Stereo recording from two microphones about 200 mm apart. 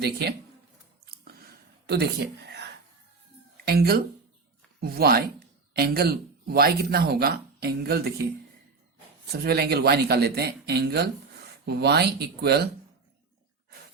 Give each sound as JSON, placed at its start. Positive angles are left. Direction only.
{"t": 0.0, "sound": "speech", "side_deg": -55}
{"t": 1.0, "sound": "a sound", "side_deg": -50}
{"t": 1.9, "sound": "speech", "side_deg": -55}
{"t": 3.7, "sound": "speech", "side_deg": -50}
{"t": 9.3, "sound": "speech", "side_deg": -50}